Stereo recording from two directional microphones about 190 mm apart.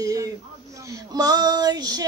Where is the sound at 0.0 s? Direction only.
20° right (ahead or behind).